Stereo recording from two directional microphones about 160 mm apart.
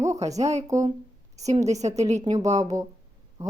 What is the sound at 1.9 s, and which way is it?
Speech, 45° right (ahead or behind).